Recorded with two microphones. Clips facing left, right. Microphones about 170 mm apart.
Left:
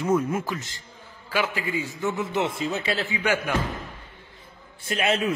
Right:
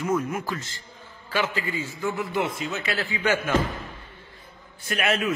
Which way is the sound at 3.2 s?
10° left (ahead or behind).